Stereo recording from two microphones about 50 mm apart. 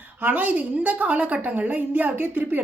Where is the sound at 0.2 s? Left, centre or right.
Right.